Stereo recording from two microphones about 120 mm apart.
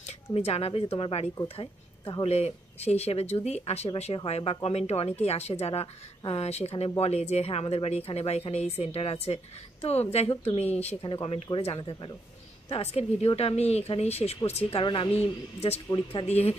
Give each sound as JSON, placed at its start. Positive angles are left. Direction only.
{"t": 0.0, "sound": "a woman's voice", "side_deg": 60}
{"t": 11.0, "sound": "speech", "side_deg": 45}
{"t": 12.6, "sound": "a woman's voice", "side_deg": 55}